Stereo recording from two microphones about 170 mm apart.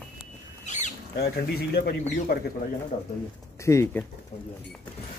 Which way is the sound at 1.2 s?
65° left (ahead or behind).